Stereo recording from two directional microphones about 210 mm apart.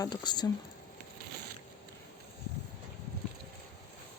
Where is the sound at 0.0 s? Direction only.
20° left (ahead or behind).